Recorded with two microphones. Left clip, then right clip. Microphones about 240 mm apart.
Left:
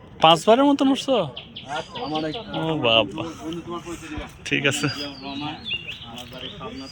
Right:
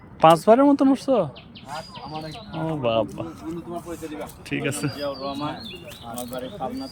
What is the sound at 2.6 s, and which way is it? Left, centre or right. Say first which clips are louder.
Speech: left 4 dB; centre.